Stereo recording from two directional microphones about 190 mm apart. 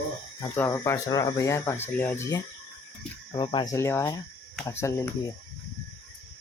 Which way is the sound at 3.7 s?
15° left (ahead or behind).